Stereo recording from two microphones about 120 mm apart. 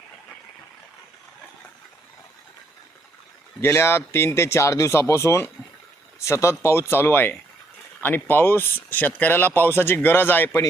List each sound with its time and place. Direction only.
3.6 s speech: 20° left (ahead or behind)